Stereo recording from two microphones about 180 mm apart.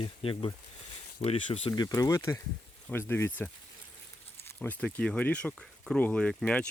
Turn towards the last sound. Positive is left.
turn(degrees=5)  # may be behind; listen again after turning